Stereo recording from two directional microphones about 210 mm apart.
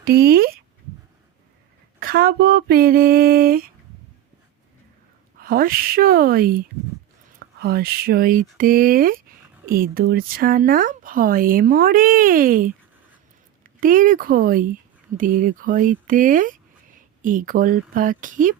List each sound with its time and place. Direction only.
0.0 s speech: 45° right (ahead or behind)
2.0 s speech: 45° right (ahead or behind)
5.4 s speech: 45° right (ahead or behind)
13.8 s speech: 40° right (ahead or behind)